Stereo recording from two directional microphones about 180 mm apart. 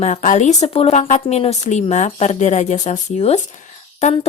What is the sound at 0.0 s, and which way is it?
A woman's voice, 45° left (ahead or behind).